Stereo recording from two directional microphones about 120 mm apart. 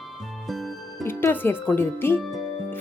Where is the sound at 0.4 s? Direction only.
Centre (ahead or behind).